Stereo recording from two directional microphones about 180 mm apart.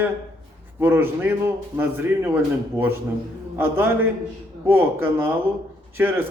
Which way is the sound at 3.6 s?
10° right (ahead or behind).